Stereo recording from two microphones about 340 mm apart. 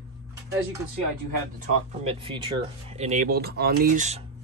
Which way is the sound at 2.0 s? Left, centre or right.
Centre.